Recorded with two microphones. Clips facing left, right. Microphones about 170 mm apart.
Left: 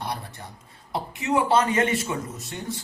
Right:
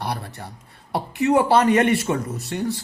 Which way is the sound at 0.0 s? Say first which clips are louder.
Right 4 dB; 65° right (ahead or behind).